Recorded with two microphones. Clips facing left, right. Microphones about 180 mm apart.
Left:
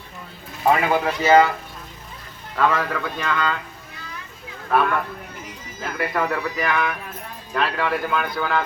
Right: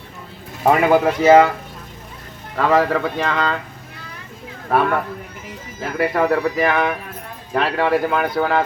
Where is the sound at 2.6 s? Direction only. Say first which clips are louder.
Right 7 dB; 35° right (ahead or behind).